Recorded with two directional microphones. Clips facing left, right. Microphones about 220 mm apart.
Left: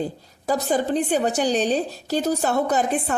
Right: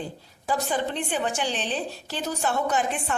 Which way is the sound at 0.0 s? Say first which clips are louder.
Left 7 dB; 40° left (ahead or behind).